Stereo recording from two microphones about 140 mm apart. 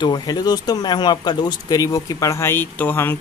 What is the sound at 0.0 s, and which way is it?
Speech, 30° left (ahead or behind).